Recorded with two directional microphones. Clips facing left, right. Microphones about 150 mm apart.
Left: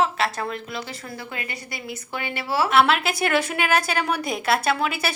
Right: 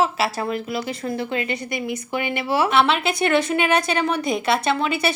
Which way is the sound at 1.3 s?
25° right (ahead or behind).